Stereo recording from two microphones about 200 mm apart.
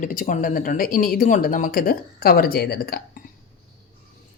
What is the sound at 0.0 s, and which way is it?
Speech, 40° left (ahead or behind).